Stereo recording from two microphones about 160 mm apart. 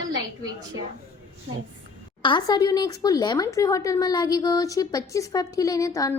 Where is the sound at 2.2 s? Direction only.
30° left (ahead or behind).